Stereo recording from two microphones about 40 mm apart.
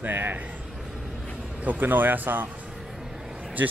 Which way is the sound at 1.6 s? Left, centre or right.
Right.